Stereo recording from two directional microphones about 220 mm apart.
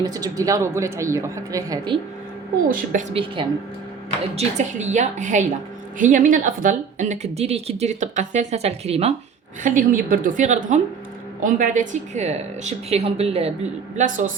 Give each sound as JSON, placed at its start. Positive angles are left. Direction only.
{"t": 0.0, "sound": "a woman's voice", "side_deg": -15}